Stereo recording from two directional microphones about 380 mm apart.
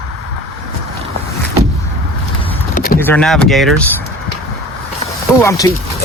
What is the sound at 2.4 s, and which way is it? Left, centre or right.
Vehicle, left.